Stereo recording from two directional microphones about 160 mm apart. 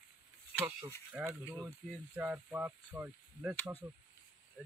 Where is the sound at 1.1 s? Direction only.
Centre (ahead or behind).